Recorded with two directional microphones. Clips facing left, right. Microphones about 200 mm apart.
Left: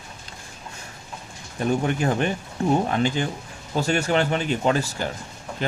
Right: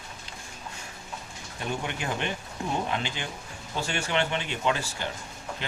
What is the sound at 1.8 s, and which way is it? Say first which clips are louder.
Speech: left 9 dB; 40° left (ahead or behind).